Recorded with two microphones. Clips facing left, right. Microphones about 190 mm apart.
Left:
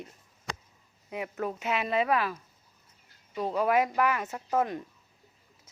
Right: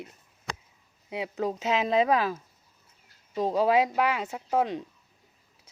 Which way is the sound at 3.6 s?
15° right (ahead or behind).